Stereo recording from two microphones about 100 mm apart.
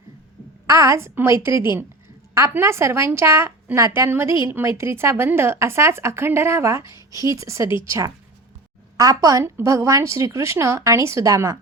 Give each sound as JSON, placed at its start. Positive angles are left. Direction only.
{"t": 0.7, "sound": "a woman's voice", "side_deg": -30}